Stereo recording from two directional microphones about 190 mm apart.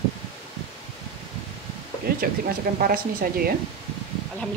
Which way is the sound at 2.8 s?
50° right (ahead or behind).